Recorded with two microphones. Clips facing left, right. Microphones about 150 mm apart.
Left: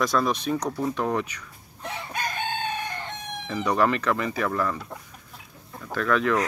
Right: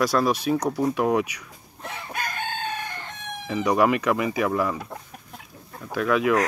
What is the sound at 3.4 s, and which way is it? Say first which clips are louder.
Speech: right 3 dB; 10° right (ahead or behind).